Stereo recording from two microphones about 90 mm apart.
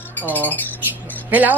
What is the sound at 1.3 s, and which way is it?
Speech, 20° right (ahead or behind).